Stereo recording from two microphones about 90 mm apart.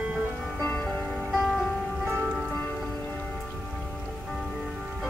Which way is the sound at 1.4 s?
5° right (ahead or behind).